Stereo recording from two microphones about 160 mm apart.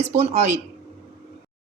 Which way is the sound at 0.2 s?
45° right (ahead or behind).